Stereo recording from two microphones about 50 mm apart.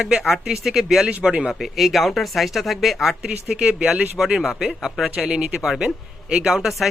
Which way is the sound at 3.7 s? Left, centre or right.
Right.